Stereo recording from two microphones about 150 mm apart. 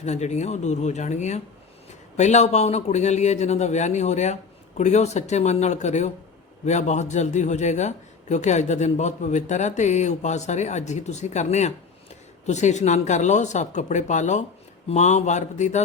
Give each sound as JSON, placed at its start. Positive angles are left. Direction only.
{"t": 0.0, "sound": "a man's voice", "side_deg": 50}